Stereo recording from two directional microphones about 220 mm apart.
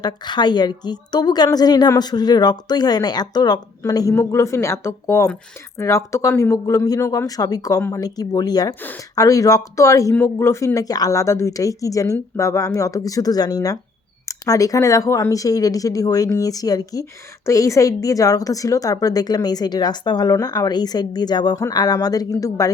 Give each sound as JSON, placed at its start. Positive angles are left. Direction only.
{"t": 0.0, "sound": "a woman's voice", "side_deg": 20}